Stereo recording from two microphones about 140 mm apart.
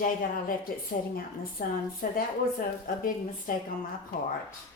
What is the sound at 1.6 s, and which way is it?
Speech, 90° left.